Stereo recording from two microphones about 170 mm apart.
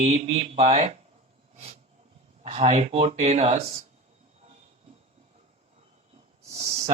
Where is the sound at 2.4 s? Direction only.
40° right (ahead or behind).